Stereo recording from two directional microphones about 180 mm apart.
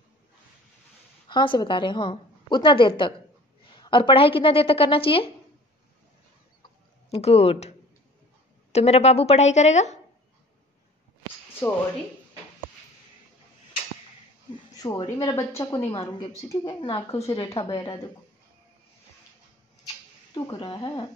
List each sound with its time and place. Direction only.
1.3 s a woman's voice: 25° left (ahead or behind)
7.1 s a woman's voice: 35° left (ahead or behind)
8.7 s a woman's voice: 35° left (ahead or behind)
14.8 s a woman's voice: 20° left (ahead or behind)
20.4 s a woman's voice: 25° left (ahead or behind)